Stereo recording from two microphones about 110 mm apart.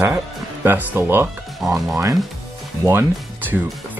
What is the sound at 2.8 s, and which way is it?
Speech, 20° right (ahead or behind).